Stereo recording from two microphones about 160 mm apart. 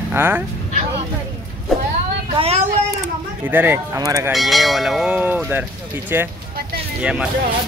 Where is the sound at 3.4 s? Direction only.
10° right (ahead or behind).